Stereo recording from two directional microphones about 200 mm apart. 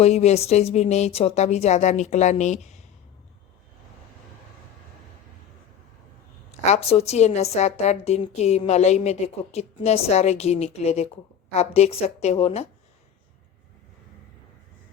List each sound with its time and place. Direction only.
0.0 s a woman's voice: 35° left (ahead or behind)
6.5 s a woman's voice: 30° left (ahead or behind)